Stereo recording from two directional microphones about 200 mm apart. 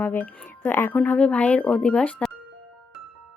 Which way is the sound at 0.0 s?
10° left (ahead or behind).